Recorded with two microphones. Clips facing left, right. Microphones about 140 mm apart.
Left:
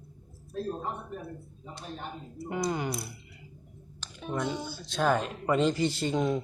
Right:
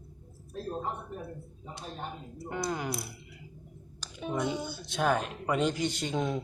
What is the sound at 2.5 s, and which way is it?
Speech, centre (ahead or behind).